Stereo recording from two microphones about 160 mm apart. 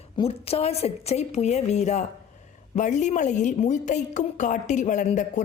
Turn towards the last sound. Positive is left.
turn(degrees=50)  # may be behind; listen again after turning